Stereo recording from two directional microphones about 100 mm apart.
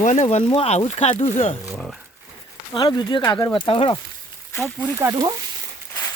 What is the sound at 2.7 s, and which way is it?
Speech, 50° left (ahead or behind).